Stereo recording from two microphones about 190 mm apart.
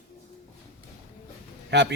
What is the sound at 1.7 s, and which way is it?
Speech, 65° right (ahead or behind).